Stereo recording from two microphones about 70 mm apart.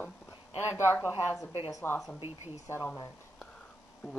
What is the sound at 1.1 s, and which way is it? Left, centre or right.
Speech, right.